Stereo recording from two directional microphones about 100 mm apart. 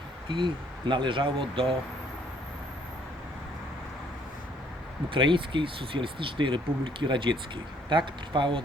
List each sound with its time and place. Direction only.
0.3 s speech: 55° right (ahead or behind)
5.0 s speech: 55° right (ahead or behind)